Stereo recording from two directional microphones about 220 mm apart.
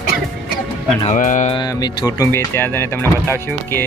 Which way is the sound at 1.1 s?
35° left (ahead or behind).